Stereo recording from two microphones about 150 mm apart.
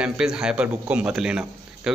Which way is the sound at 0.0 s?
5° right (ahead or behind).